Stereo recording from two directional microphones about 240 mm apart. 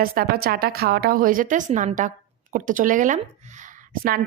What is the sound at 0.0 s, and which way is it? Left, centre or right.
A woman's voice, right.